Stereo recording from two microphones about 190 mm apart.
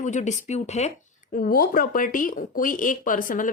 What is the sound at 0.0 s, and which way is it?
Speech, 40° left (ahead or behind).